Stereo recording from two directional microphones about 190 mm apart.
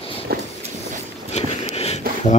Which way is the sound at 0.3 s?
55° right (ahead or behind).